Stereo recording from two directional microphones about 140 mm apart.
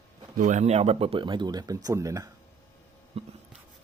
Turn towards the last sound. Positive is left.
turn(degrees=-40)  # may be behind; listen again after turning